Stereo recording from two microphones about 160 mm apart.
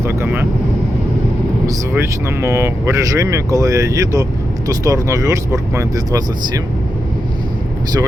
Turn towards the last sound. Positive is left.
turn(degrees=-25)  # may be behind; listen again after turning